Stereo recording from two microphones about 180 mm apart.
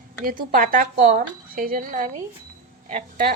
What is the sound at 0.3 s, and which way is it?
Speech, 50° right (ahead or behind).